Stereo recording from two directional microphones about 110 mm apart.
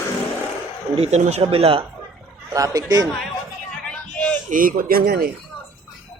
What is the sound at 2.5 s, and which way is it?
Speech, 30° right (ahead or behind).